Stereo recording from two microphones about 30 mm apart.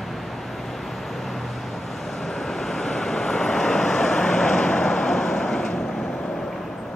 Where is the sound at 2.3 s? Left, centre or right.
Centre.